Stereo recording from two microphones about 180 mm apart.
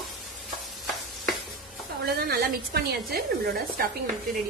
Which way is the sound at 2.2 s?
60° right (ahead or behind).